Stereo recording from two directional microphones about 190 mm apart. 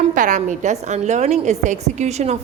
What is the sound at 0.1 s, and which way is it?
A woman's voice, 40° right (ahead or behind).